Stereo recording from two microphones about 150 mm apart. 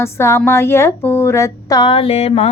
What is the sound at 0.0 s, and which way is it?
A woman's voice, 15° left (ahead or behind).